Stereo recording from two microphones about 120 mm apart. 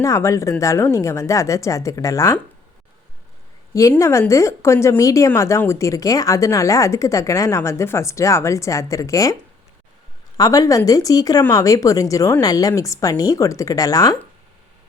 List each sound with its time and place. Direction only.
0.0 s a woman's voice: 25° left (ahead or behind)
3.8 s a woman's voice: 25° left (ahead or behind)
10.3 s a woman's voice: 30° left (ahead or behind)